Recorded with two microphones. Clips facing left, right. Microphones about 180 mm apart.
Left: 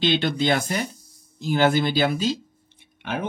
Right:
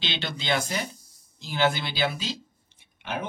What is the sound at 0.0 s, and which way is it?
A man's voice, 50° left (ahead or behind).